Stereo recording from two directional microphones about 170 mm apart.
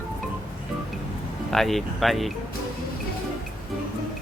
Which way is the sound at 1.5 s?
Centre (ahead or behind).